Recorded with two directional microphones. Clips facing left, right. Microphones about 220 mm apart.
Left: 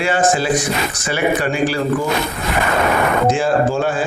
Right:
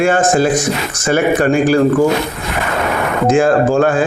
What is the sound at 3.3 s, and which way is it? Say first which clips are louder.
Speech: right 5 dB; 50° right (ahead or behind).